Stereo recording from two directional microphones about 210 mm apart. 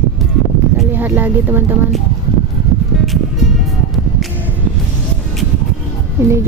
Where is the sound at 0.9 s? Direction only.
10° right (ahead or behind).